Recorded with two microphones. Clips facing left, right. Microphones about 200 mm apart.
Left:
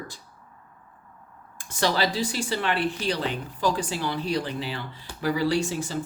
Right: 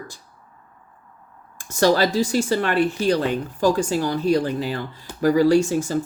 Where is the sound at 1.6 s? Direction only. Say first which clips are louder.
Right 7 dB; 45° right (ahead or behind).